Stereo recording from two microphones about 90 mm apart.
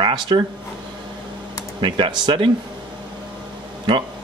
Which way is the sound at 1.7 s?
65° right (ahead or behind).